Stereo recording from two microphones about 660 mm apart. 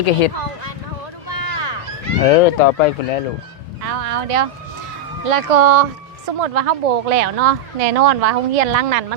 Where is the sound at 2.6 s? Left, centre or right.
Left.